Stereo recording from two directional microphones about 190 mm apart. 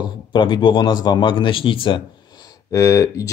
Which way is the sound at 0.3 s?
25° left (ahead or behind).